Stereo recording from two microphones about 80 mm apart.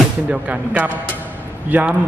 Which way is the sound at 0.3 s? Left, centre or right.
Centre.